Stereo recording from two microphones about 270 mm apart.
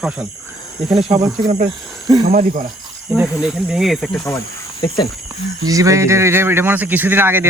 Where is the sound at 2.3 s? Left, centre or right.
Right.